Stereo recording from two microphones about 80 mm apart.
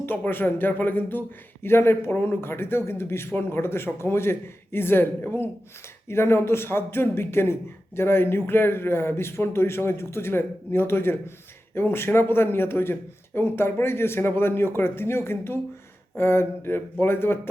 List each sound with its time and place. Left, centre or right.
0.0 s a man's voice: left